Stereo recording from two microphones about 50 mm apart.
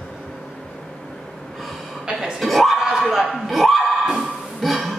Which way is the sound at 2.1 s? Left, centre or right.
Centre.